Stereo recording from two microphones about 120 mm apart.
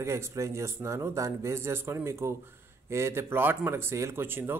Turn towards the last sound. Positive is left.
turn(degrees=-20)  # may be behind; listen again after turning